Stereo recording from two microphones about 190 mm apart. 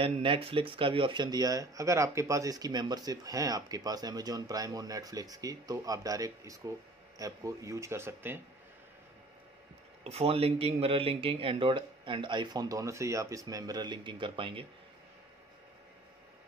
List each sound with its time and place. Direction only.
0.0 s speech: 30° right (ahead or behind); by 8.4 s 10° right (ahead or behind)
10.0 s speech: 35° right (ahead or behind)